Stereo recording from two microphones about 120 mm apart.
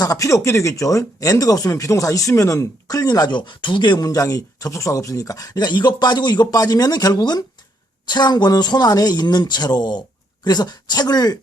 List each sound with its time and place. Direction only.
0.0 s speech: 30° left (ahead or behind)